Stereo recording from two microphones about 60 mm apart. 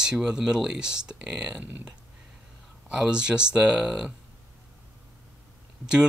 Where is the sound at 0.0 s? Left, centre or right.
Centre.